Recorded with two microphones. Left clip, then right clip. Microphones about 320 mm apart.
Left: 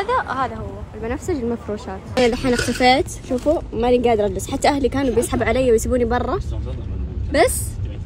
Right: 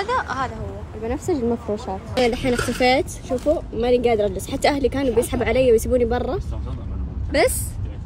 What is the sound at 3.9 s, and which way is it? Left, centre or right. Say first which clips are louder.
Speech: left 1 dB; left.